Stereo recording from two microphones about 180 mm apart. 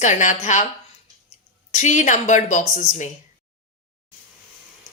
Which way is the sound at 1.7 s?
40° left (ahead or behind).